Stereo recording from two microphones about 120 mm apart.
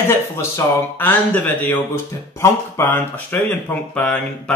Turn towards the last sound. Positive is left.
turn(degrees=10)  # may be behind; listen again after turning